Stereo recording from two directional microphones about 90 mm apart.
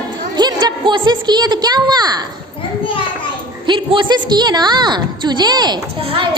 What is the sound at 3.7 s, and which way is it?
A woman's voice, 60° right (ahead or behind).